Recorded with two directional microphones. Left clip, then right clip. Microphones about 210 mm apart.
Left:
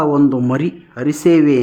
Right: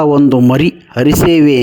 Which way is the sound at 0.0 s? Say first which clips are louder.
Right 5 dB; 35° right (ahead or behind).